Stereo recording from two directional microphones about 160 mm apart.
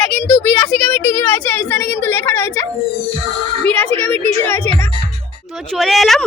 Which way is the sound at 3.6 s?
10° left (ahead or behind).